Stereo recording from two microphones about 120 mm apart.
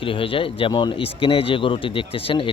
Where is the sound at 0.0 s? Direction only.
45° left (ahead or behind).